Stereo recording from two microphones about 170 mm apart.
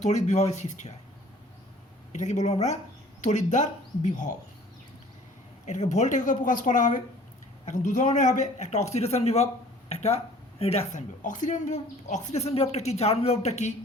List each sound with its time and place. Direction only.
0.0 s a man's voice: 45° left (ahead or behind)
2.1 s a man's voice: 45° left (ahead or behind)
5.6 s a man's voice: 40° left (ahead or behind)